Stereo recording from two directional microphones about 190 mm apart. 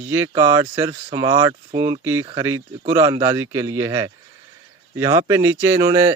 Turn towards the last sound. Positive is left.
turn(degrees=-15)  # may be behind; listen again after turning